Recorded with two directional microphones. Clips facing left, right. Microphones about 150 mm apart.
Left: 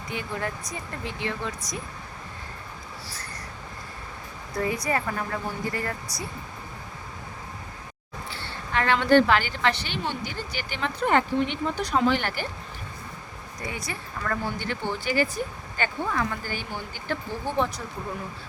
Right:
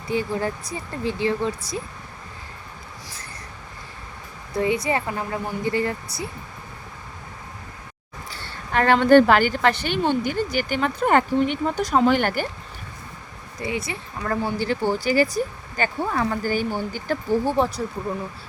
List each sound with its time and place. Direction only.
0.1 s speech: 30° right (ahead or behind)
4.8 s speech: 25° right (ahead or behind)
8.3 s a woman's voice: 45° right (ahead or behind)
13.6 s speech: 25° right (ahead or behind)